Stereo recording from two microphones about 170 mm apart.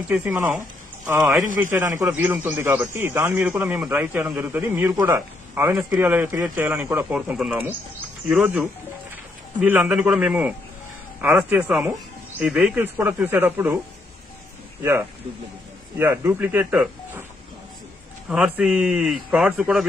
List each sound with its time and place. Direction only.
0.1 s a man's voice: 10° right (ahead or behind)
14.8 s a man's voice: 15° right (ahead or behind)
18.3 s a man's voice: 5° right (ahead or behind)